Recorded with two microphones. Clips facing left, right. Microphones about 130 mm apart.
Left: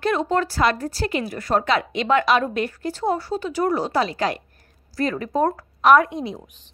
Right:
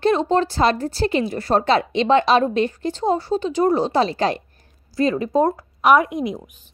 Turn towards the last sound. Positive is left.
turn(degrees=-15)  # may be behind; listen again after turning